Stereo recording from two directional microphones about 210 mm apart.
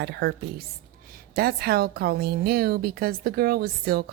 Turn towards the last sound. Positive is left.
turn(degrees=-45)  # may be behind; listen again after turning